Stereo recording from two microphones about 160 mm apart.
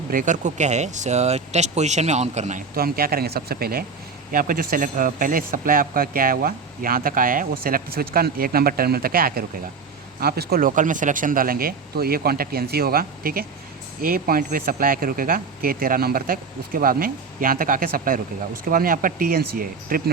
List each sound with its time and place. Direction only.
0.1 s speech: 55° right (ahead or behind)
2.7 s speech: 70° right (ahead or behind)
4.3 s speech: 60° right (ahead or behind)